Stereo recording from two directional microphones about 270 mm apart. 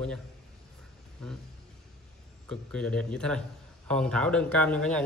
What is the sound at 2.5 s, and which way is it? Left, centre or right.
A man's voice, centre.